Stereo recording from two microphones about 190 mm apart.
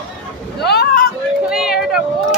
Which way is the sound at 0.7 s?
55° left (ahead or behind).